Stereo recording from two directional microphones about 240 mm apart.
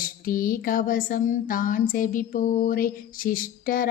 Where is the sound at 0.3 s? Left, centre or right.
Left.